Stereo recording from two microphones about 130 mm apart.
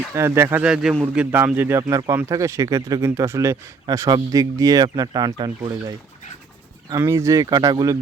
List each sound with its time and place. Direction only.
0.1 s speech: 20° right (ahead or behind)
6.9 s speech: 20° right (ahead or behind)